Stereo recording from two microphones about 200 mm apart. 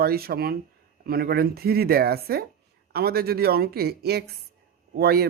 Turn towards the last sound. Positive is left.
turn(degrees=-50)  # may be behind; listen again after turning